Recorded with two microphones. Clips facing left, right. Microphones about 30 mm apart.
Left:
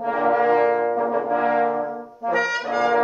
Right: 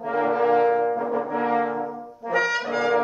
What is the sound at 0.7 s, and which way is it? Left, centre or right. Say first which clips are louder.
Brass instrument: left 2 dB; left.